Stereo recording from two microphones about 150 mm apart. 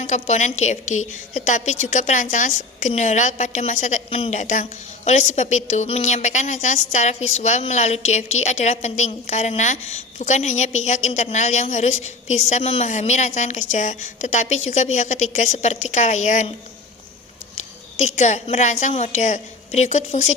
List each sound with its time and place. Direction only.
0.1 s a woman's voice: 50° left (ahead or behind)
18.0 s a woman's voice: 50° left (ahead or behind)